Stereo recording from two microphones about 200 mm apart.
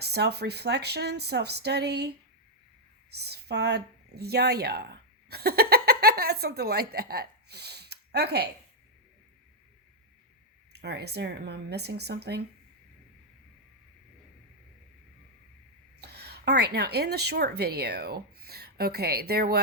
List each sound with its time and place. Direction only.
0.0 s speech: 55° right (ahead or behind)
3.2 s speech: 55° right (ahead or behind)
10.7 s speech: 55° right (ahead or behind)
16.0 s a woman's voice: 55° right (ahead or behind)